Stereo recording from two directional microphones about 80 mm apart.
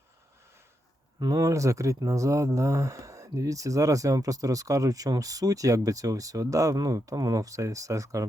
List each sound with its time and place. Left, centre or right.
1.2 s speech: right